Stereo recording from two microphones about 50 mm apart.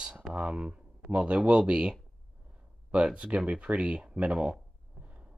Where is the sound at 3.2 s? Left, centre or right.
Right.